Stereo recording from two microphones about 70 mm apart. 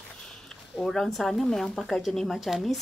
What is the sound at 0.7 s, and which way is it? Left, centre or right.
Speech, centre.